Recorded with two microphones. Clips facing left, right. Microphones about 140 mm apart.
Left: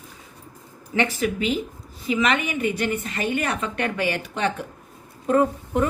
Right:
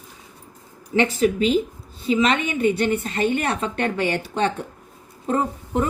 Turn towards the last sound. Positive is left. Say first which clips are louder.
# left 2 dB
turn(degrees=-25)  # may be behind; listen again after turning